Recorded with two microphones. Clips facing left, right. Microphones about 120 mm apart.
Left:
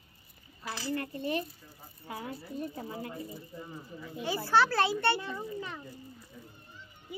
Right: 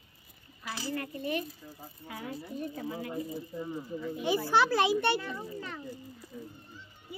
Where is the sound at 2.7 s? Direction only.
30° left (ahead or behind).